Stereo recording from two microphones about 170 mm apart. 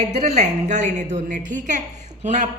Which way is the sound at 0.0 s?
40° right (ahead or behind).